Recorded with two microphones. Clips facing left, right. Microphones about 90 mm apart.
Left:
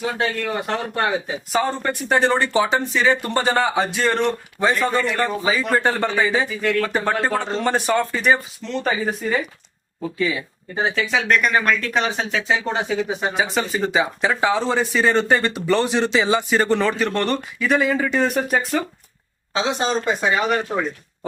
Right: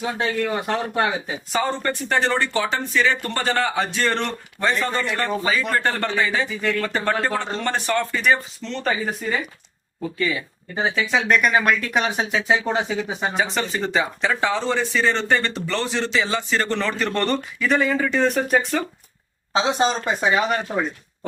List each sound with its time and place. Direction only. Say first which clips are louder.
0.0 s speech: even; 5° right (ahead or behind); by 6.5 s 10° left (ahead or behind)
6.5 s speech: left 3 dB; centre (ahead or behind)
6.8 s speech: left 1 dB; 10° left (ahead or behind)
19.5 s speech: right 1 dB; 20° right (ahead or behind)